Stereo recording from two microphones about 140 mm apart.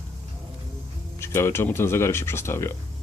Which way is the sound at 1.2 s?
20° left (ahead or behind).